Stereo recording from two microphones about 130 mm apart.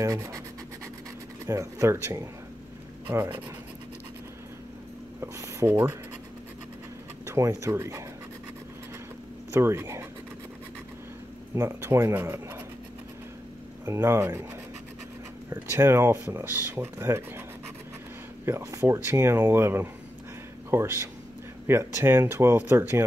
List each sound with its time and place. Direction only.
0.0 s speech: 30° right (ahead or behind)
1.4 s speech: 25° right (ahead or behind)
5.2 s speech: 15° right (ahead or behind)
7.2 s speech: 25° right (ahead or behind)
9.5 s speech: 20° right (ahead or behind)
11.5 s speech: 20° right (ahead or behind)
13.8 s speech: 20° right (ahead or behind)
15.7 s speech: 20° right (ahead or behind)
18.4 s speech: 20° right (ahead or behind)